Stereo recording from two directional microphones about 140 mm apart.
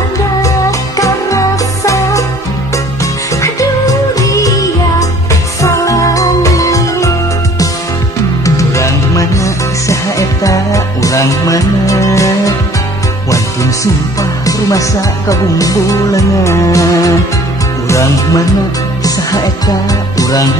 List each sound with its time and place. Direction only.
0.4 s music: 25° left (ahead or behind)
3.0 s music: 25° left (ahead or behind)
14.4 s music: 25° left (ahead or behind)